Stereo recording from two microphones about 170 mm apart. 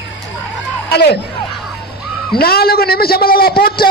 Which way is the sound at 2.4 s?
65° left (ahead or behind).